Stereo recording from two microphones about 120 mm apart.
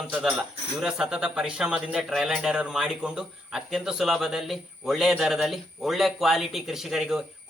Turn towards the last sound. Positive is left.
turn(degrees=-5)  # may be behind; listen again after turning